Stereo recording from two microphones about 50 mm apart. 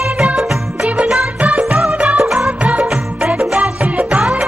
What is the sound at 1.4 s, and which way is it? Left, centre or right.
Music, right.